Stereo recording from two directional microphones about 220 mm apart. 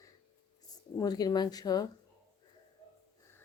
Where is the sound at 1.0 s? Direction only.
15° left (ahead or behind).